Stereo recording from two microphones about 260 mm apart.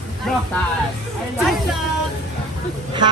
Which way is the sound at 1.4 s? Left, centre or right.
Centre.